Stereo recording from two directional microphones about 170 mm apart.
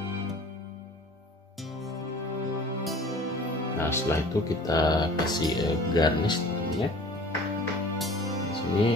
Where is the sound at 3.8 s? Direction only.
15° left (ahead or behind).